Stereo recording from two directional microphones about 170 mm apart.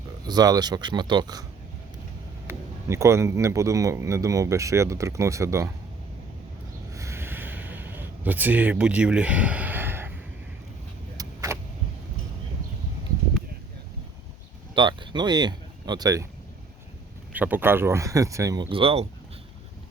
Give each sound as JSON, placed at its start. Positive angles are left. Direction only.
{"t": 0.3, "sound": "speech", "side_deg": -25}
{"t": 2.5, "sound": "speech", "side_deg": -15}
{"t": 6.9, "sound": "a sound", "side_deg": -15}
{"t": 11.2, "sound": "vehicle", "side_deg": -20}
{"t": 14.8, "sound": "speech", "side_deg": -30}
{"t": 17.3, "sound": "speech", "side_deg": -10}